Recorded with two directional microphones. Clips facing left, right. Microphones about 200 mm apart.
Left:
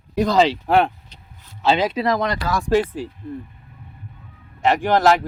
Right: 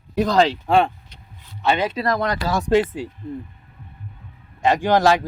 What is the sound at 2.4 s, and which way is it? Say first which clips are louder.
Speech: right 2 dB; 25° right (ahead or behind).